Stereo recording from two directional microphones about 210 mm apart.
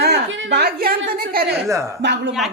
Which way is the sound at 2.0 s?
55° right (ahead or behind).